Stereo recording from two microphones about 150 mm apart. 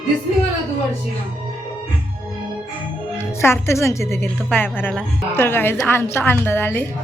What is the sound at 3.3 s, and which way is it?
A woman's voice, 15° left (ahead or behind).